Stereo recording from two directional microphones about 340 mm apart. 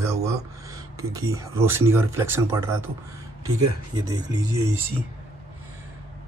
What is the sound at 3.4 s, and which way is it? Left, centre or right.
Speech, right.